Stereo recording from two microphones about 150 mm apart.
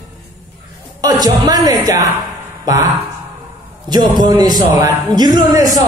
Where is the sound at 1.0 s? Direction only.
25° right (ahead or behind).